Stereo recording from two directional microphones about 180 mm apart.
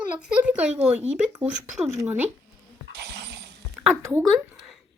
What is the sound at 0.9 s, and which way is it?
Speech, 5° right (ahead or behind).